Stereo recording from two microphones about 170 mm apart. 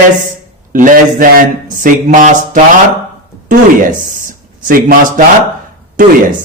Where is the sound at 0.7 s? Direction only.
50° right (ahead or behind).